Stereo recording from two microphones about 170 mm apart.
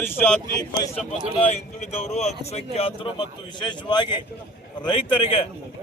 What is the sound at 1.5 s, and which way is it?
A man's voice, 40° left (ahead or behind).